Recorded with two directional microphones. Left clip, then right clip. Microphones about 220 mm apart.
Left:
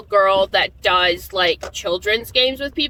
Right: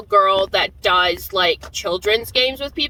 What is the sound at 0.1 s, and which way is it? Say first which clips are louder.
Speech: even; 20° right (ahead or behind).